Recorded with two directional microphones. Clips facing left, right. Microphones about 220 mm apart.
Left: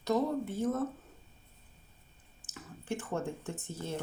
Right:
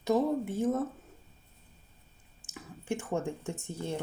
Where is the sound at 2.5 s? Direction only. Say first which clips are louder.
Right 3 dB; 15° right (ahead or behind).